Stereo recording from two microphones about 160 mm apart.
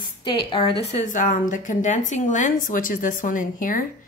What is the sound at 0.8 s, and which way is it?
A woman's voice, 50° left (ahead or behind).